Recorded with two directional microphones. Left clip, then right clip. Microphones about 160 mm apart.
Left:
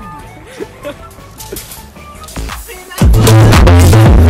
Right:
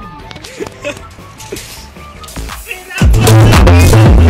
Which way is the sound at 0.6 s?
15° right (ahead or behind).